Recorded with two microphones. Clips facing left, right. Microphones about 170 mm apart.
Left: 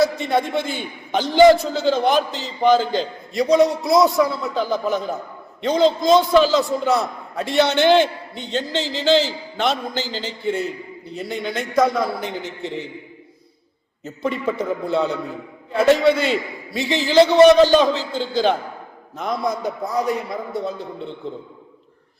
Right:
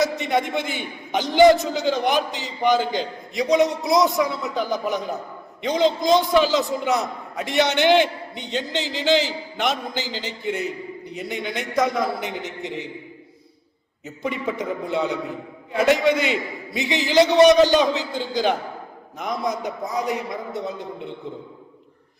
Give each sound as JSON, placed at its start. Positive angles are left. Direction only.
{"t": 0.0, "sound": "a man's voice", "side_deg": -20}
{"t": 14.0, "sound": "a man's voice", "side_deg": -15}